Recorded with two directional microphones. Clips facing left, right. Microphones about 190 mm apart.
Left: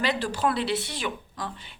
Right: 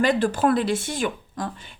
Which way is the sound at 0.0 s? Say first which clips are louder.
Right 6 dB; 50° right (ahead or behind).